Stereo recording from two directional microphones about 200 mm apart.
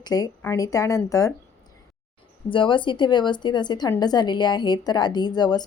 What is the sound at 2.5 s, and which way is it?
Speech, 25° left (ahead or behind).